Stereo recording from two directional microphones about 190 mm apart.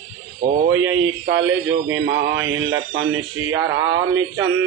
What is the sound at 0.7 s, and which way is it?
Speech, 90° right.